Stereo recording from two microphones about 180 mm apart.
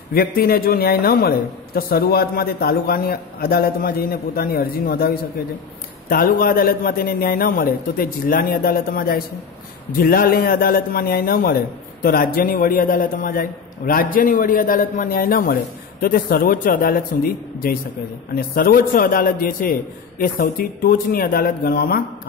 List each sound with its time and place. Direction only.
0.1 s a man's voice: 55° left (ahead or behind)